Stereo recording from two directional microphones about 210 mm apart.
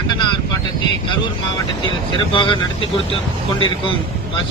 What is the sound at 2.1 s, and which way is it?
Speech, 25° left (ahead or behind).